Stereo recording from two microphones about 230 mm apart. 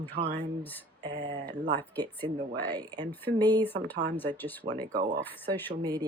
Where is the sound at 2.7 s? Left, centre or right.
Centre.